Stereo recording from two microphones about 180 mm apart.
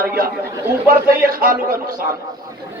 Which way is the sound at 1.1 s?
55° right (ahead or behind).